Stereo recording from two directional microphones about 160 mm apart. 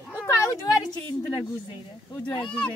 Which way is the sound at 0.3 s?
20° left (ahead or behind).